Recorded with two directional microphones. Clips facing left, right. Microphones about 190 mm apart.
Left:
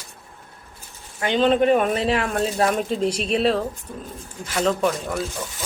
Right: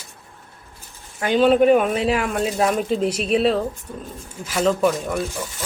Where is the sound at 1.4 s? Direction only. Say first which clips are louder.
Right 3 dB; 10° right (ahead or behind).